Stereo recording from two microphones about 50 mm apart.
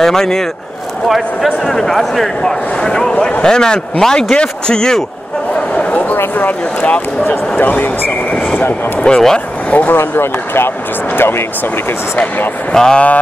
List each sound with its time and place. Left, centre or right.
0.0 s speech: centre
1.0 s speech: centre
5.8 s a sound: left
6.1 s speech: left
9.1 s speech: left
9.9 s speech: left
12.7 s speech: centre